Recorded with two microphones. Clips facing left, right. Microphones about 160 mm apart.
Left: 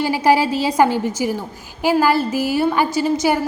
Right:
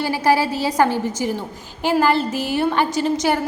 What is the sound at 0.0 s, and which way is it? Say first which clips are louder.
A woman's voice: left 2 dB; 15° left (ahead or behind).